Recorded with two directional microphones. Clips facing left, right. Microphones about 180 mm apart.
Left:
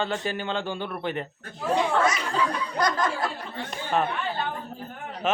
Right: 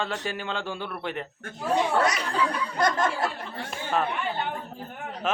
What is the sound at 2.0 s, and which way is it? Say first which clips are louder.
Speech: even; 35° right (ahead or behind).